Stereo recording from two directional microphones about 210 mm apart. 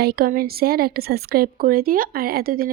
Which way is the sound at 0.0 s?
45° right (ahead or behind).